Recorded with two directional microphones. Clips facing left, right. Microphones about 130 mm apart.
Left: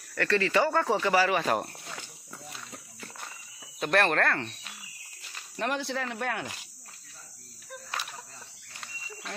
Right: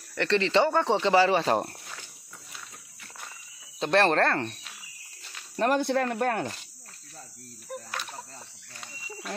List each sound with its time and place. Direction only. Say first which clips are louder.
0.1 s speech: right 2 dB; 20° right (ahead or behind)
3.8 s speech: right 3 dB; 30° right (ahead or behind)
5.6 s speech: right 7 dB; 50° right (ahead or behind)